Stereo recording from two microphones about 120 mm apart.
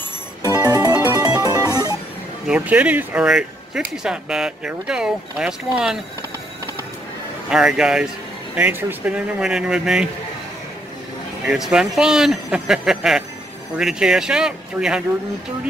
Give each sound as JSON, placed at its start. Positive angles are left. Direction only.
{"t": 0.4, "sound": "music", "side_deg": -30}
{"t": 2.4, "sound": "speech", "side_deg": -10}
{"t": 7.4, "sound": "speech", "side_deg": -5}
{"t": 11.4, "sound": "speech", "side_deg": -5}